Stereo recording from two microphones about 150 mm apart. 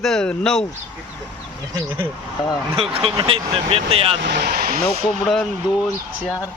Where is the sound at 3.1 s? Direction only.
35° right (ahead or behind).